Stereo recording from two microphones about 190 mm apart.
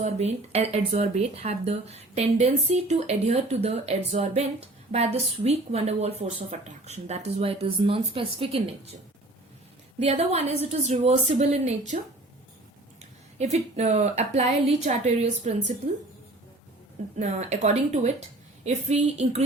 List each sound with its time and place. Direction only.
0.0 s speech: 35° right (ahead or behind)
10.0 s speech: 35° right (ahead or behind)
13.4 s speech: 35° right (ahead or behind)
17.2 s speech: 40° right (ahead or behind)